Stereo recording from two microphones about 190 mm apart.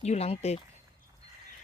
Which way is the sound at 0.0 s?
35° left (ahead or behind).